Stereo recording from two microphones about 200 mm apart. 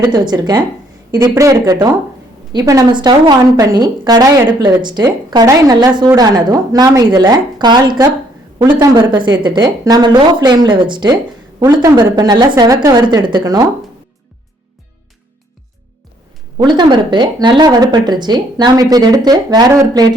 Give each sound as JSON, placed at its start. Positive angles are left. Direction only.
{"t": 0.0, "sound": "a woman's voice", "side_deg": -20}
{"t": 16.6, "sound": "a woman's voice", "side_deg": -20}